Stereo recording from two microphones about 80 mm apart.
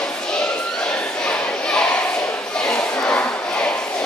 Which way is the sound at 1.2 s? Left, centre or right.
Centre.